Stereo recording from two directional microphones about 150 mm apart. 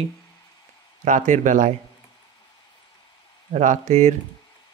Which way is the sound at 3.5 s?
55° right (ahead or behind).